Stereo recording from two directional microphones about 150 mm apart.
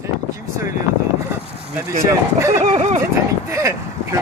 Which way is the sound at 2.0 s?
20° right (ahead or behind).